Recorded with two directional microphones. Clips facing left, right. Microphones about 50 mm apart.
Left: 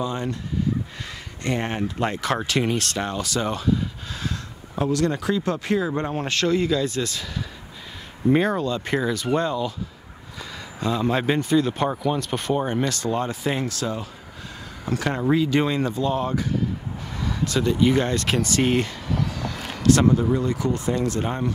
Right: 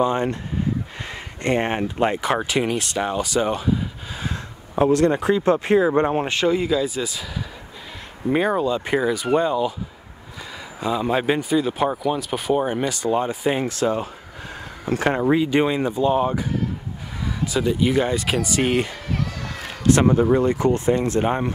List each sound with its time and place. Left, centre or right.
0.0 s speech: right
1.4 s speech: right; by 7.2 s centre
8.3 s speech: centre
10.8 s speech: centre; by 15.2 s right
15.2 s speech: centre